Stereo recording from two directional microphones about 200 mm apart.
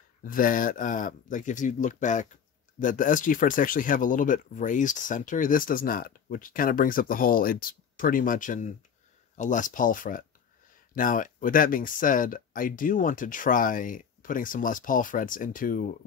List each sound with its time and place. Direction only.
0.2 s speech: 45° left (ahead or behind)